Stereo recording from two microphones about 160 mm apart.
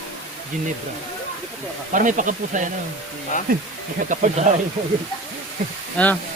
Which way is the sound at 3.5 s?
65° right (ahead or behind).